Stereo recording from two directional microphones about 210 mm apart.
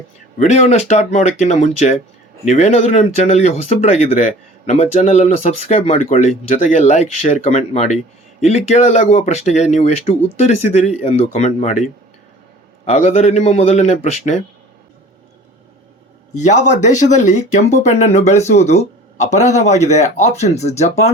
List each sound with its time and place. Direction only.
0.3 s speech: 30° left (ahead or behind)
16.3 s speech: 35° left (ahead or behind)